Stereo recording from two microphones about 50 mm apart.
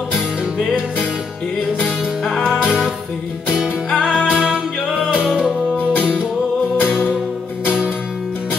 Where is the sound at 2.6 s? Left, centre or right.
Centre.